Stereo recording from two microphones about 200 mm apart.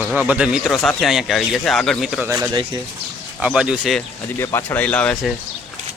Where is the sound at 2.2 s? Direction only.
15° right (ahead or behind).